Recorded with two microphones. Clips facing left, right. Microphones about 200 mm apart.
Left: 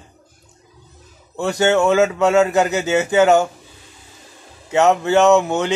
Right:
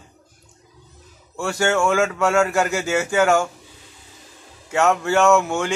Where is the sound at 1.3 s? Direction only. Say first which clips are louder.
Left 4 dB; 20° left (ahead or behind).